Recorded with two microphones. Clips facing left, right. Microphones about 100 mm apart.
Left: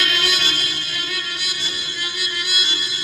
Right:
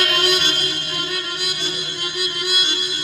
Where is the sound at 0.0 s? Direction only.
55° right (ahead or behind).